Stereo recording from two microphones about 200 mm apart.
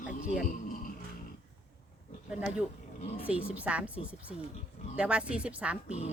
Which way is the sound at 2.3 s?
5° right (ahead or behind).